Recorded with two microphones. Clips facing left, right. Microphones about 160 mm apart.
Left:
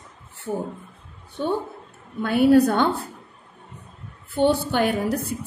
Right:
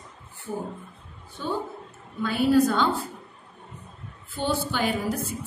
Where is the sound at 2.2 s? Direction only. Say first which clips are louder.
Left 4 dB; 60° left (ahead or behind).